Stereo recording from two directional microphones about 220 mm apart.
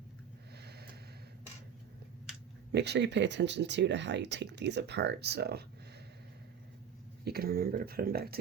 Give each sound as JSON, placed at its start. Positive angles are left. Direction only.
{"t": 0.5, "sound": "a sound", "side_deg": -45}
{"t": 2.7, "sound": "speech", "side_deg": -50}
{"t": 7.3, "sound": "speech", "side_deg": -45}